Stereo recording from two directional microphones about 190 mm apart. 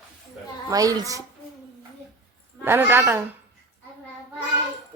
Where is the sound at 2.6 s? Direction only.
10° right (ahead or behind).